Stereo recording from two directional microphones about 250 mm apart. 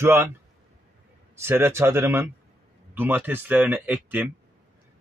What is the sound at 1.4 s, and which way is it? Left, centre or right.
Speech, centre.